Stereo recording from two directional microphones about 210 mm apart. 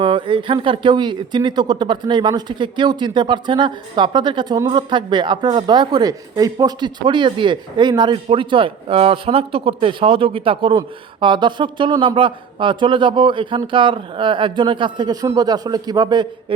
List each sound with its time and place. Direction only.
0.0 s speech: 25° right (ahead or behind)